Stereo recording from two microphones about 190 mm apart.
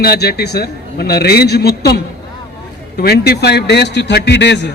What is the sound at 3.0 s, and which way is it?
A man's voice, 55° left (ahead or behind).